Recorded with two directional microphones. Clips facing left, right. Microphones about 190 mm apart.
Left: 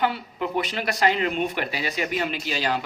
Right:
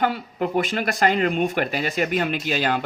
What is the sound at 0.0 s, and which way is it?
Speech, 45° right (ahead or behind).